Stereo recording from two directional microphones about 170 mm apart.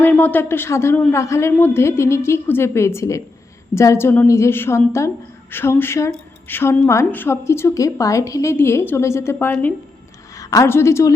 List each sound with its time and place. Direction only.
0.0 s a woman's voice: 10° left (ahead or behind)